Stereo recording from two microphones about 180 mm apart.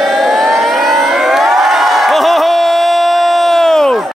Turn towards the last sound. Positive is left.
turn(degrees=0)  # may be behind; listen again after turning